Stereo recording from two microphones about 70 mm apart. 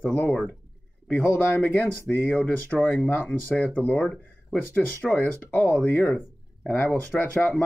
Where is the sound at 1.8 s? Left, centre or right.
Centre.